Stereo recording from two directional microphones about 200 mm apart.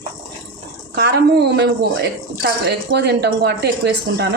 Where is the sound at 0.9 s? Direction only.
55° right (ahead or behind).